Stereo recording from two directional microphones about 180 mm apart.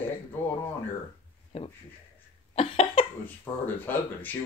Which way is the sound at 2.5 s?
35° left (ahead or behind).